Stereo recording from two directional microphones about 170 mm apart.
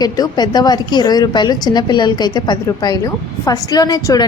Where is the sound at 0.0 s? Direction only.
25° left (ahead or behind).